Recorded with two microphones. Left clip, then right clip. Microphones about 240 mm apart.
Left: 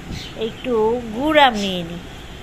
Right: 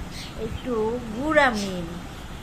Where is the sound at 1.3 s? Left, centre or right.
Centre.